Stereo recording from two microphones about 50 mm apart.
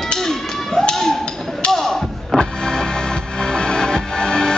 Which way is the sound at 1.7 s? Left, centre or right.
Centre.